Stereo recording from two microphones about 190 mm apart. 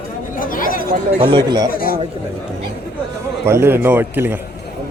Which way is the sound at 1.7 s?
50° left (ahead or behind).